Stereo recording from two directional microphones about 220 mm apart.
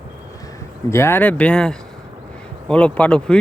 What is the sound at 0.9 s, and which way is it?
Speech, 10° left (ahead or behind).